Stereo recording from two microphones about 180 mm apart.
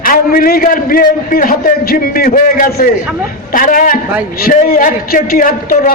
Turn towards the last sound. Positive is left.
turn(degrees=50)  # may be behind; listen again after turning